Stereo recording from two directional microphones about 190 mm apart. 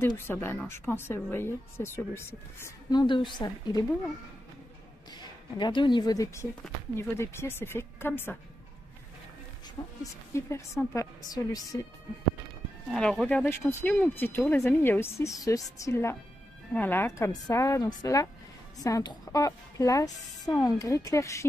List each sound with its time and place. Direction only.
0.0 s a woman's voice: 10° left (ahead or behind)
5.1 s a woman's voice: 25° left (ahead or behind)
9.8 s a woman's voice: 20° left (ahead or behind)
12.9 s a woman's voice: 5° left (ahead or behind)